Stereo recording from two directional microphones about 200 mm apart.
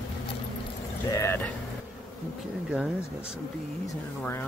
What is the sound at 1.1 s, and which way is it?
Speech, 15° left (ahead or behind).